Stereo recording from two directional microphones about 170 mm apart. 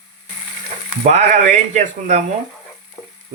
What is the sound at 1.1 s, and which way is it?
Speech, 45° right (ahead or behind).